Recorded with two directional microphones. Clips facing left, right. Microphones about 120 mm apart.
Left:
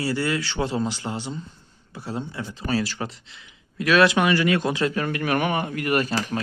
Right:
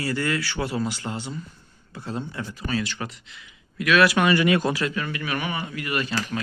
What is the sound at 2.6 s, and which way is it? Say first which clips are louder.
Speech: left 3 dB; 40° left (ahead or behind).